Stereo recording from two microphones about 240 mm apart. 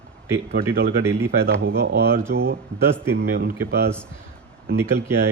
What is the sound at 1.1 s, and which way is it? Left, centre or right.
Speech, right.